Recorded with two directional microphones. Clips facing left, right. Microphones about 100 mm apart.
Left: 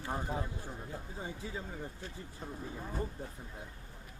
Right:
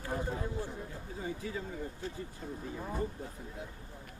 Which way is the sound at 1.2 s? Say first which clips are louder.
Right 6 dB; 25° left (ahead or behind).